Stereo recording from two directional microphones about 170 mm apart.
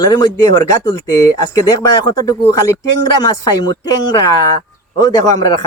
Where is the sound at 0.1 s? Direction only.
20° left (ahead or behind).